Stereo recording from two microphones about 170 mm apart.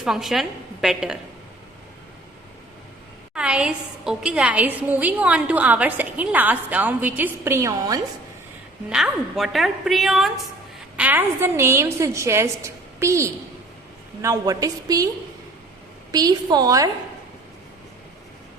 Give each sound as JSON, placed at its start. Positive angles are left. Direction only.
{"t": 0.0, "sound": "a woman's voice", "side_deg": 0}
{"t": 3.3, "sound": "a woman's voice", "side_deg": -5}
{"t": 8.9, "sound": "a woman's voice", "side_deg": 0}
{"t": 16.1, "sound": "a woman's voice", "side_deg": -25}